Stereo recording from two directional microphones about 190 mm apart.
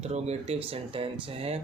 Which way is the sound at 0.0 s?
35° right (ahead or behind).